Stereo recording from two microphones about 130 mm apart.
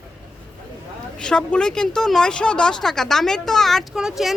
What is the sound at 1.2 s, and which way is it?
Speech, 5° left (ahead or behind).